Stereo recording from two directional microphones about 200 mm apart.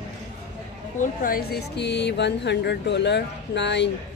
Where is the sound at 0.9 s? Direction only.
40° left (ahead or behind).